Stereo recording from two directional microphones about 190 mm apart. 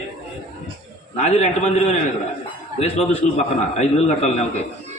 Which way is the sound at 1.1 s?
35° left (ahead or behind).